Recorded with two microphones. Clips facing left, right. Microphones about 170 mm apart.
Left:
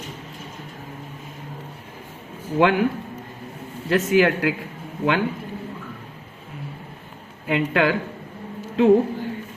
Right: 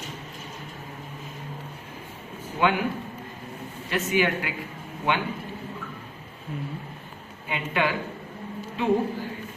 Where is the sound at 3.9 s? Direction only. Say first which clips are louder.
Left 7 dB; 90° left.